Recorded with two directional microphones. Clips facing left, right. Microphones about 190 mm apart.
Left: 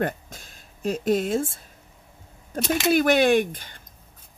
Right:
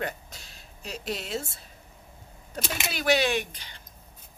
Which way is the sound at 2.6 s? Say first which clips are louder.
Left 8 dB; 50° left (ahead or behind).